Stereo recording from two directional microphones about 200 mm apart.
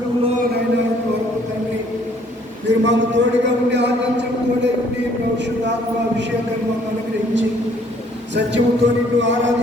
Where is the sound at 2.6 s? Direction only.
65° right (ahead or behind).